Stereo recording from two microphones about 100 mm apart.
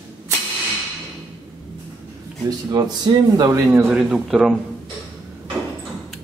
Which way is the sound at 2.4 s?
40° right (ahead or behind).